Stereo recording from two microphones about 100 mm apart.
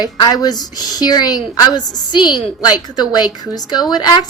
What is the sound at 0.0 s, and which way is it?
A woman's voice, 40° left (ahead or behind).